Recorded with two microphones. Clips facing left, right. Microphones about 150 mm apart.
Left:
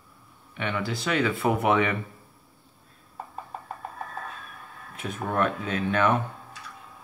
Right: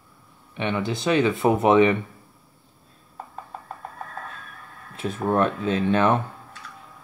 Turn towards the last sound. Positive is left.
turn(degrees=-30)  # may be behind; listen again after turning